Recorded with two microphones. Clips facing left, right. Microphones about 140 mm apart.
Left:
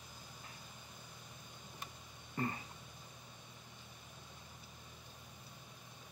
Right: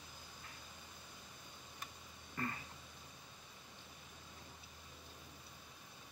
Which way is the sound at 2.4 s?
25° left (ahead or behind).